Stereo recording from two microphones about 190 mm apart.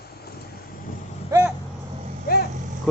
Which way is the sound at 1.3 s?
15° right (ahead or behind).